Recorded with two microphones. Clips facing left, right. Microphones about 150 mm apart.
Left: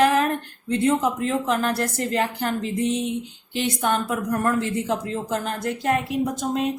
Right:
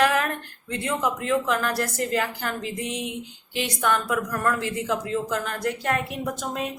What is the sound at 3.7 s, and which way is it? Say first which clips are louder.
A woman's voice: right 2 dB; 25° left (ahead or behind).